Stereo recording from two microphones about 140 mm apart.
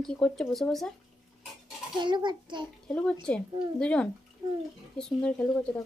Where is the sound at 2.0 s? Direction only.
35° right (ahead or behind).